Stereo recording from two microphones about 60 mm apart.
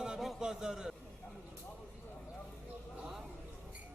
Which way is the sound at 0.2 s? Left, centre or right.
Centre.